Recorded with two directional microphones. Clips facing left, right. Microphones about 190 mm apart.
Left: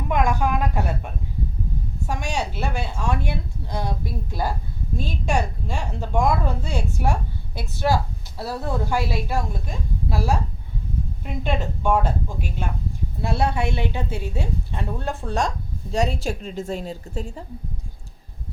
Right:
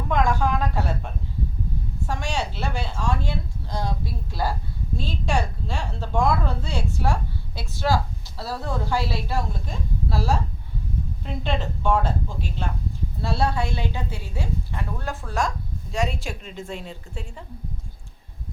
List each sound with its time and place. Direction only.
0.1 s speech: 15° left (ahead or behind)
2.0 s a woman's voice: 15° left (ahead or behind); by 17.4 s 40° left (ahead or behind)